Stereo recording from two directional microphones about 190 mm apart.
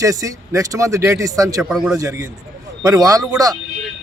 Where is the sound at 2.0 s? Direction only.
15° right (ahead or behind).